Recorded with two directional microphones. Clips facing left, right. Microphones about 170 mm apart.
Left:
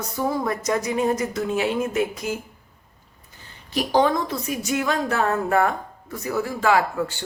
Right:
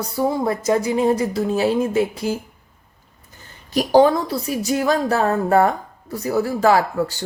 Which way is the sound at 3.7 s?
40° right (ahead or behind).